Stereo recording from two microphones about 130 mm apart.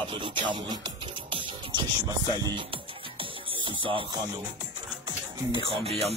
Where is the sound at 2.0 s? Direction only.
30° right (ahead or behind).